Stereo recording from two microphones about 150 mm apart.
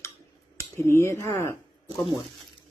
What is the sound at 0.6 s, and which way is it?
Speech, 15° left (ahead or behind).